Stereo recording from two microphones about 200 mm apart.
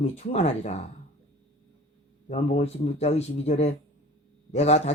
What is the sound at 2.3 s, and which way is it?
Speech, 35° left (ahead or behind).